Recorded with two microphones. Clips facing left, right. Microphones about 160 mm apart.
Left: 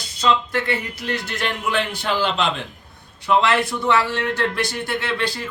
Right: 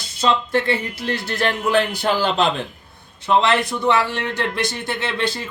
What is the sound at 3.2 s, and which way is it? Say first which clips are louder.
A man's voice: right 1 dB; 20° right (ahead or behind).